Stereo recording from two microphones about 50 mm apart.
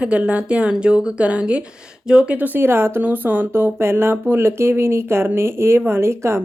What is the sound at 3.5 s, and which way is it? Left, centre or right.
Speech, right.